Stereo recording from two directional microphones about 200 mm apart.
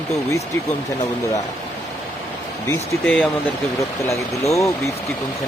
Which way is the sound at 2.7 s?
5° left (ahead or behind).